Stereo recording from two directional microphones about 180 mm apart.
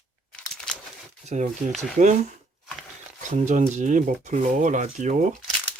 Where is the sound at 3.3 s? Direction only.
45° right (ahead or behind).